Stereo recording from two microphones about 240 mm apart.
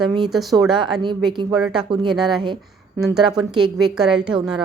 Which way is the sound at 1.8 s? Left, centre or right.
Centre.